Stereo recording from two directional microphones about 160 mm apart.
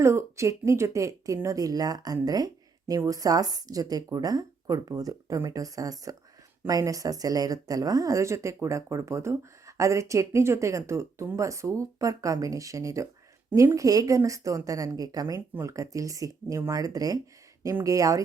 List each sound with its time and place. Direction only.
0.0 s a woman's voice: 20° right (ahead or behind)